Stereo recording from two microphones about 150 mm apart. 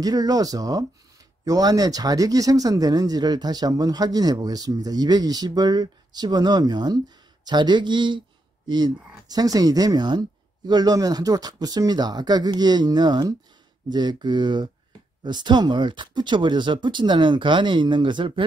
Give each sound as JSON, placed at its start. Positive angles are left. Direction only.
{"t": 0.0, "sound": "speech", "side_deg": -25}